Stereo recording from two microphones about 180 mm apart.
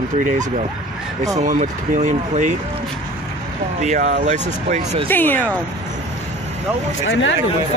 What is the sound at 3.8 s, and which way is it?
Speech, 40° right (ahead or behind).